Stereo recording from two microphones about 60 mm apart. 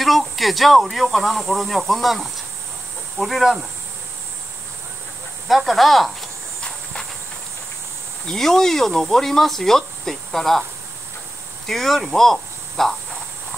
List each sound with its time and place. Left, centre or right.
0.0 s speech: centre
5.5 s speech: centre
6.6 s a sound: centre
8.3 s speech: centre
11.6 s speech: centre